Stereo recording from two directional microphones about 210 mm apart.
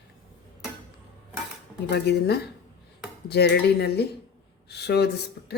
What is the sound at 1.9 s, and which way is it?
Speech, 50° left (ahead or behind).